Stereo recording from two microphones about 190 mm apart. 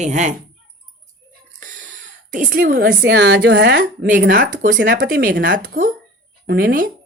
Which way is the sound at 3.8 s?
45° right (ahead or behind).